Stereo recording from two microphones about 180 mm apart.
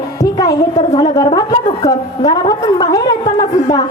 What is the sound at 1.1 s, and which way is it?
A woman's voice, 20° left (ahead or behind).